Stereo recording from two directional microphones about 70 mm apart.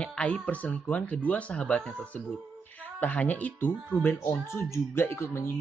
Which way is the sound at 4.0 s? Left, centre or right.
Left.